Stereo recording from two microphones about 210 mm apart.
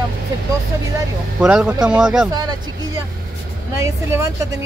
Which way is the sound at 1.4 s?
5° right (ahead or behind).